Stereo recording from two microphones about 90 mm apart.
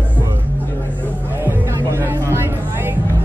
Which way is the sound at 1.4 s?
30° right (ahead or behind).